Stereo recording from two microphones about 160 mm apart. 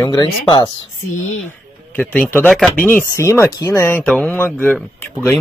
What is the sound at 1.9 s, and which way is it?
Speech, 10° left (ahead or behind).